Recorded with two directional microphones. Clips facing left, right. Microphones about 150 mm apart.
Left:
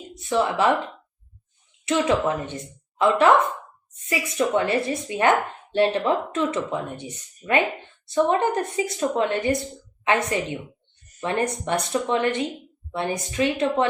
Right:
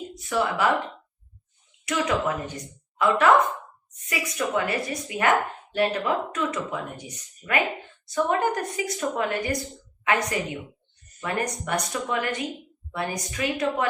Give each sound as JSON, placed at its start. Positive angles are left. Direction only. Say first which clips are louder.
{"t": 0.2, "sound": "speech", "louder": "left 3 dB", "side_deg": 25}
{"t": 1.8, "sound": "a woman's voice", "louder": "left 4 dB", "side_deg": 25}